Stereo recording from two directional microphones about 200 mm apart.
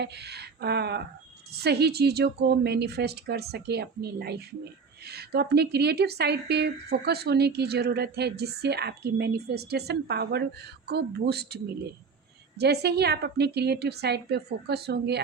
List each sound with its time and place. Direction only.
0.0 s speech: 55° right (ahead or behind)